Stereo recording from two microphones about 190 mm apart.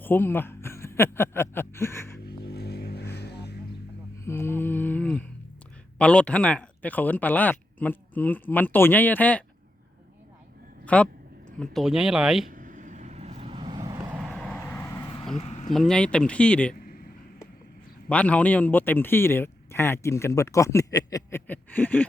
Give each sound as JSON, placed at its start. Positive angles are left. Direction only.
{"t": 0.0, "sound": "speech", "side_deg": 10}
{"t": 2.2, "sound": "vehicle", "side_deg": 60}
{"t": 4.3, "sound": "humming", "side_deg": 10}
{"t": 6.0, "sound": "speech", "side_deg": 5}
{"t": 10.8, "sound": "speech", "side_deg": 5}
{"t": 12.5, "sound": "vehicle", "side_deg": -45}
{"t": 14.1, "sound": "vehicle", "side_deg": -5}
{"t": 15.4, "sound": "a sound", "side_deg": 35}
{"t": 15.7, "sound": "speech", "side_deg": 0}
{"t": 16.7, "sound": "a sound", "side_deg": 50}
{"t": 18.1, "sound": "speech", "side_deg": 5}